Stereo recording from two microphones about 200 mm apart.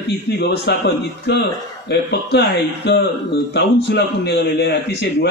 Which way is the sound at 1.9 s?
55° left (ahead or behind).